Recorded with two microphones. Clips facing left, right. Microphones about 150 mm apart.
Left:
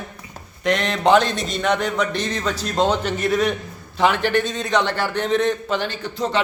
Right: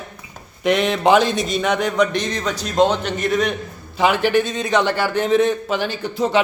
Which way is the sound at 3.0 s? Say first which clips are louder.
Even; 5° left (ahead or behind).